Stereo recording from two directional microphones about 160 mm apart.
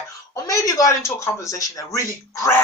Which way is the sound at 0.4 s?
20° left (ahead or behind).